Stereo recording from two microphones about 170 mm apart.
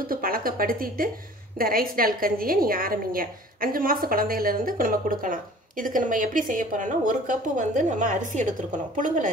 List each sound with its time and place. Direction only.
0.0 s a woman's voice: 60° right (ahead or behind)